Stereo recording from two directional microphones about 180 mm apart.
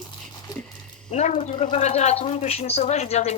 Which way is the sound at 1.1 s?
40° left (ahead or behind).